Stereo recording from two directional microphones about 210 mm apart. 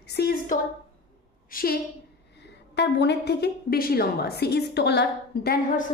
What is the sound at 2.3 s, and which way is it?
A woman's voice, 55° left (ahead or behind).